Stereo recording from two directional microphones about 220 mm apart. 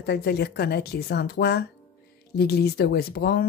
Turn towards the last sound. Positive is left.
turn(degrees=45)  # may be behind; listen again after turning